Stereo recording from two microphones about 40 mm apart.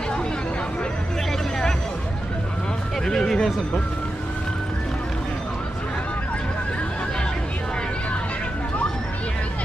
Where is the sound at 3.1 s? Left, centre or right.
Centre.